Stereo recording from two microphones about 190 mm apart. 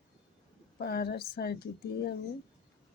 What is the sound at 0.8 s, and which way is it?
Speech, 55° left (ahead or behind).